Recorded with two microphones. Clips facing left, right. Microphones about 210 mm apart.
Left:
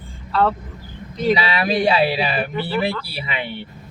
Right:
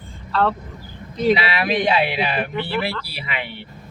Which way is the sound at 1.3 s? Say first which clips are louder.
Left 1 dB; 35° left (ahead or behind).